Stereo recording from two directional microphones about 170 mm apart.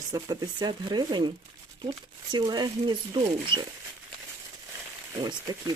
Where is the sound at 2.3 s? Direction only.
25° right (ahead or behind).